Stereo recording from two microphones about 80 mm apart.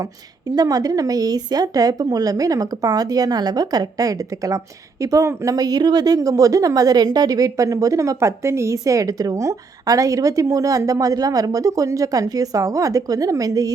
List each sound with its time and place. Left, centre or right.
0.5 s speech: right